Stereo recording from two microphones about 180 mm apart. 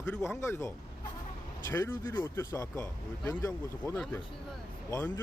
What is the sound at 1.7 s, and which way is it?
Speech, 20° left (ahead or behind).